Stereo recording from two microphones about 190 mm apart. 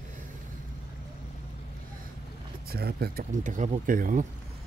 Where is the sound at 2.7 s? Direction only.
55° right (ahead or behind).